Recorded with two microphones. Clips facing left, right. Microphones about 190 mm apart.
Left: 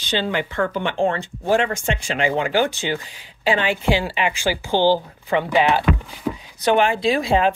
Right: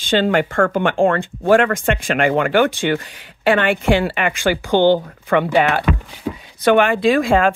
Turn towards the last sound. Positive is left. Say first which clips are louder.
# right 4 dB
turn(degrees=-50)  # may be behind; listen again after turning